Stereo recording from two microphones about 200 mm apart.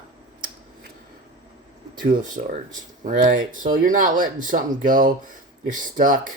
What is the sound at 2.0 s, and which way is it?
Speech, 40° right (ahead or behind).